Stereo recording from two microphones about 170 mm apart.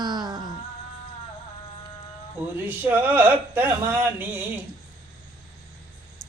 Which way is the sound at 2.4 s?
10° right (ahead or behind).